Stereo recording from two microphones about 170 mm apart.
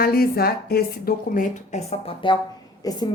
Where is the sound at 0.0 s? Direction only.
65° left (ahead or behind).